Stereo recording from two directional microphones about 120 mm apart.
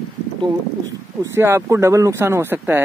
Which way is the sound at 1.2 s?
20° right (ahead or behind).